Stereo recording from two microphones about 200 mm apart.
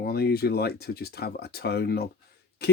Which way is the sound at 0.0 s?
50° left (ahead or behind).